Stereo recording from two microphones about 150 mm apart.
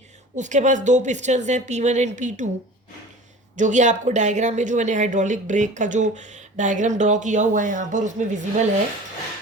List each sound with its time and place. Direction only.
0.3 s a woman's voice: 55° right (ahead or behind)
3.5 s speech: 55° right (ahead or behind)